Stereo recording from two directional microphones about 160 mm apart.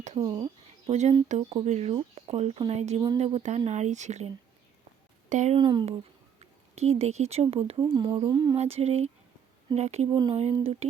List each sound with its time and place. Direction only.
0.2 s speech: 25° right (ahead or behind)
0.9 s speech: 45° right (ahead or behind)
5.3 s speech: 50° right (ahead or behind)
5.5 s speech: 30° right (ahead or behind)
6.7 s speech: 40° right (ahead or behind)
7.8 s speech: 25° right (ahead or behind)
8.5 s speech: 40° right (ahead or behind)
10.1 s speech: 25° right (ahead or behind)
10.6 s speech: 40° right (ahead or behind)